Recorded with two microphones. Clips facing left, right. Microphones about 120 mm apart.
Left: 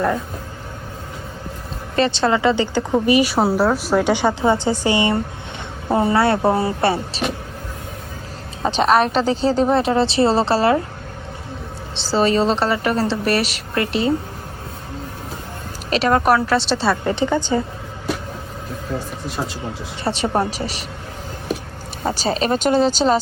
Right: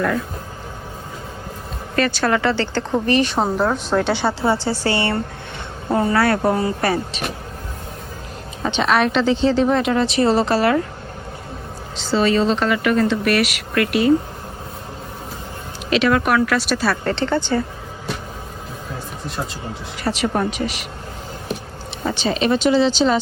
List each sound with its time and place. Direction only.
2.0 s a woman's voice: 25° left (ahead or behind)
8.6 s a woman's voice: 35° left (ahead or behind)
11.9 s a woman's voice: 35° left (ahead or behind)
15.9 s a woman's voice: 35° left (ahead or behind)
17.0 s speech: 15° left (ahead or behind)
20.1 s a woman's voice: 30° left (ahead or behind)
22.0 s a woman's voice: 40° left (ahead or behind)